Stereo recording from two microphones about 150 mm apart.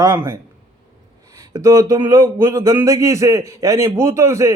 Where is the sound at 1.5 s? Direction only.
25° right (ahead or behind).